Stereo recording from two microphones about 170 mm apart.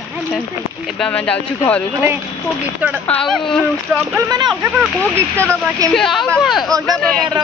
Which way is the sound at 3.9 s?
15° right (ahead or behind).